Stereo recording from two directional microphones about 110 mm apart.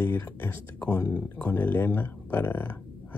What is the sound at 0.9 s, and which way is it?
Speech, 35° left (ahead or behind).